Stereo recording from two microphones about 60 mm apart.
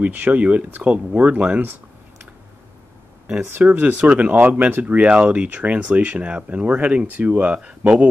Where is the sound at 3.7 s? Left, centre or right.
Right.